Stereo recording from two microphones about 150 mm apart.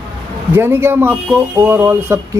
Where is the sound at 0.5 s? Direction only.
15° right (ahead or behind).